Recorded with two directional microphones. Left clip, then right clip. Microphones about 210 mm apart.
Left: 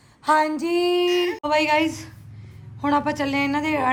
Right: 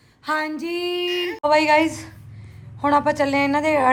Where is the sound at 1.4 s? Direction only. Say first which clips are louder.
Right 7 dB; 10° left (ahead or behind).